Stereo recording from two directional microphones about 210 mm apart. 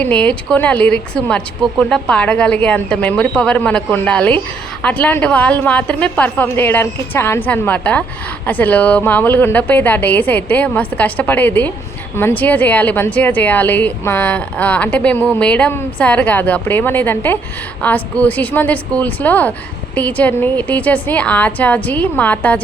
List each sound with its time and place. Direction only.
0.0 s a woman's voice: 5° left (ahead or behind)